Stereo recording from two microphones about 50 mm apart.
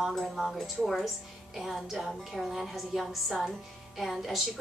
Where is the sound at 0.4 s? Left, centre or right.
Centre.